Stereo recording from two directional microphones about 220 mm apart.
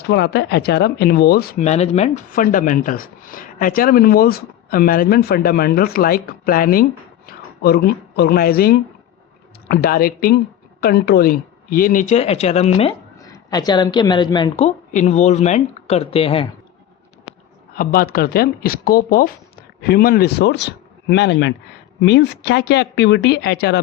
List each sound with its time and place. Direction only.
0.1 s speech: 50° left (ahead or behind)
1.6 s speech: 30° left (ahead or behind)
13.1 s a woman's voice: 15° left (ahead or behind)
17.7 s speech: 40° left (ahead or behind)